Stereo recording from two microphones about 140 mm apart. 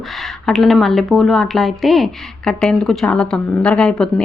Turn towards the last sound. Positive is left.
turn(degrees=5)  # may be behind; listen again after turning